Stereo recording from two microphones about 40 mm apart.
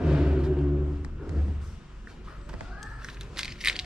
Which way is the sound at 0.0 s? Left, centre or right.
Right.